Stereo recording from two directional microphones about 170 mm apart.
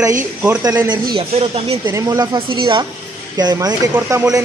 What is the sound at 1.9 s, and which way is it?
A man's voice, 20° right (ahead or behind).